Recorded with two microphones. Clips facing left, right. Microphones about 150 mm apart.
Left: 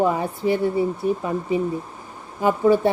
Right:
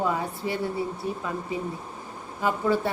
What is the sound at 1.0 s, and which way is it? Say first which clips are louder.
Speech: left 9 dB; 60° left (ahead or behind).